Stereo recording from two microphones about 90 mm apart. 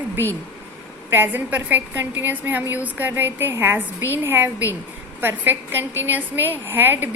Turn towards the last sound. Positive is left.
turn(degrees=-25)  # may be behind; listen again after turning